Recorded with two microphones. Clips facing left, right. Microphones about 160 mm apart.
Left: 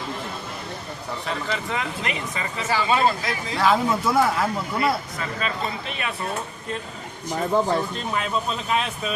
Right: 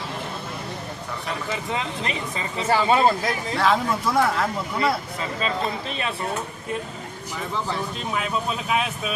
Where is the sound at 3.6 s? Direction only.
Centre (ahead or behind).